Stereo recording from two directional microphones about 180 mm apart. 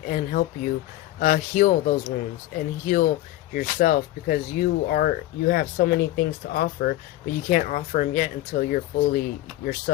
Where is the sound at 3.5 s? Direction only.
50° left (ahead or behind).